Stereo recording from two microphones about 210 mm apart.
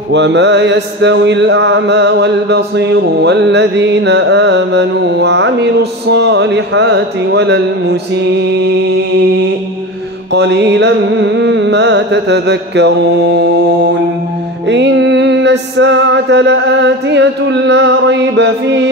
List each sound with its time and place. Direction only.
0.1 s mantra: 55° right (ahead or behind)
14.7 s mantra: 55° right (ahead or behind)